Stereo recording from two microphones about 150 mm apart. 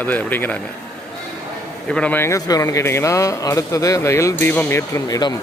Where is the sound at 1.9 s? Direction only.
5° left (ahead or behind); by 5.4 s 25° left (ahead or behind).